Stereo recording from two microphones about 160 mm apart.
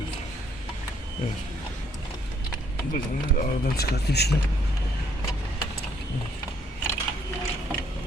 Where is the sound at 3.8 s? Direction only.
85° left.